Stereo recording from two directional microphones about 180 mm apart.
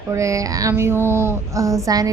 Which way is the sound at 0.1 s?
15° right (ahead or behind).